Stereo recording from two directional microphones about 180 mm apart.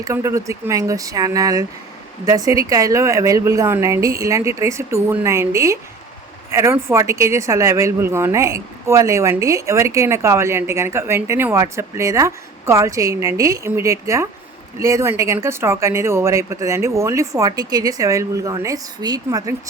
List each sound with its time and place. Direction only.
0.0 s a woman's voice: 15° right (ahead or behind)